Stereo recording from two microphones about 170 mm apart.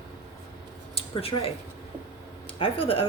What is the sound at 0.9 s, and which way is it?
Speech, 35° left (ahead or behind).